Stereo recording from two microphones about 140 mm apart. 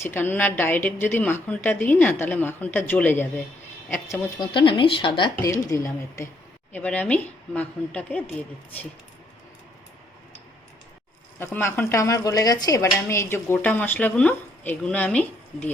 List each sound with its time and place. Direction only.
0.0 s speech: 15° left (ahead or behind)
4.4 s speech: 35° left (ahead or behind)
5.4 s speech: 20° left (ahead or behind)
6.7 s speech: 10° left (ahead or behind)
11.3 s speech: 15° left (ahead or behind)